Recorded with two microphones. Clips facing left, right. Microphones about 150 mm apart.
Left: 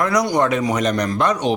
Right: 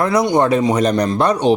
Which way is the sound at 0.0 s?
25° right (ahead or behind).